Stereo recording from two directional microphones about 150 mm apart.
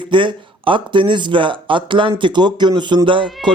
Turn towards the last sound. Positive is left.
turn(degrees=-35)  # may be behind; listen again after turning